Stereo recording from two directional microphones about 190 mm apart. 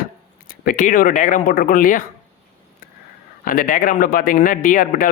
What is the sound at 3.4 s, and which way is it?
Speech, 45° left (ahead or behind).